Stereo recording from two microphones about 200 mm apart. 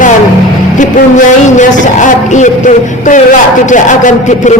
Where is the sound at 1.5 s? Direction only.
40° left (ahead or behind).